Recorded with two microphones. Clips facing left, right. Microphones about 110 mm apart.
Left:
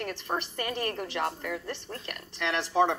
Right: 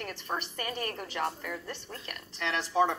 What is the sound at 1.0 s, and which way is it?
Speech, 55° left (ahead or behind).